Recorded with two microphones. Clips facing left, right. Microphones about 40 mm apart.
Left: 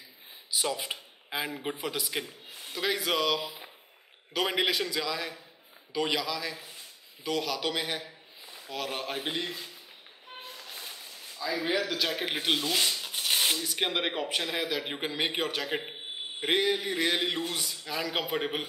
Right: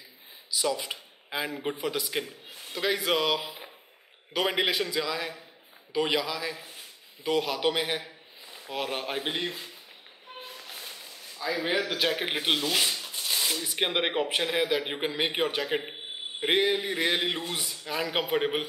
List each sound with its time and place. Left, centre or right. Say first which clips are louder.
0.5 s speech: right 3 dB; left
1.6 s a man's voice: right 3 dB; centre
3.4 s a sound: right 1 dB; centre
4.3 s speech: right 1 dB; centre
11.3 s speech: right 1 dB; right
12.5 s speech: right 2 dB; right
13.0 s a sound: left 2 dB; left
13.6 s speech: right 2 dB; centre
14.8 s speech: right 2 dB; centre
17.3 s speech: even; right
17.6 s speech: right 2 dB; centre